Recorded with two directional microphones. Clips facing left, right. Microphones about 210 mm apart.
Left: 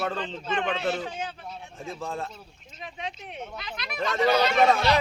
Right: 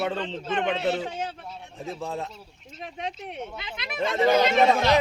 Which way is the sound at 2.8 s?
45° right (ahead or behind).